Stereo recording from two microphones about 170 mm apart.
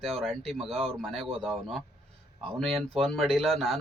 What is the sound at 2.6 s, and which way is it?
Speech, centre (ahead or behind).